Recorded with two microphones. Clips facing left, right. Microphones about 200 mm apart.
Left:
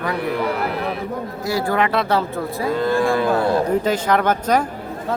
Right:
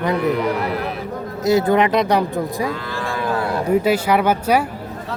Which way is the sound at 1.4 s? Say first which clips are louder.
Right 6 dB; 20° right (ahead or behind).